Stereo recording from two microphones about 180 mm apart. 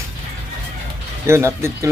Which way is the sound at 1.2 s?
15° right (ahead or behind).